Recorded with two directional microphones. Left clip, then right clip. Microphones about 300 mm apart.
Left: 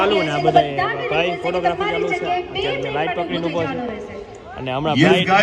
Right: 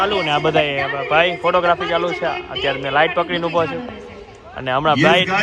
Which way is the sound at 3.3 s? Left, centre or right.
Centre.